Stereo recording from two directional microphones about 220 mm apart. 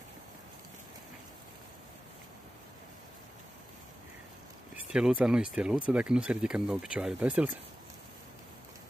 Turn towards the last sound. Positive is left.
turn(degrees=-5)  # may be behind; listen again after turning